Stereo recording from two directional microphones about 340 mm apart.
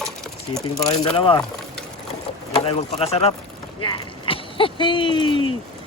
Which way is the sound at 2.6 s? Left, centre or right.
Centre.